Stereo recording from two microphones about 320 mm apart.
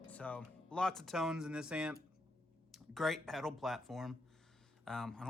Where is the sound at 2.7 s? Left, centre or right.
Centre.